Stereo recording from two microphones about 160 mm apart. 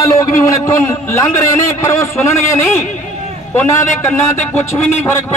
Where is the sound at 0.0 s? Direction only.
20° left (ahead or behind).